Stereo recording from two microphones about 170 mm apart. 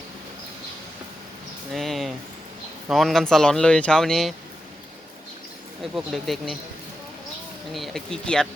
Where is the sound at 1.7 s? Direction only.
Centre (ahead or behind).